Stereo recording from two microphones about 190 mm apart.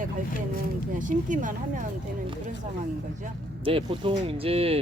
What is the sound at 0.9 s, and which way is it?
Speech, 45° right (ahead or behind).